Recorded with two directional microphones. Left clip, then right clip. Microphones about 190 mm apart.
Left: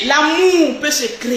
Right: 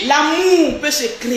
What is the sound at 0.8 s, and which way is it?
Speech, 15° left (ahead or behind).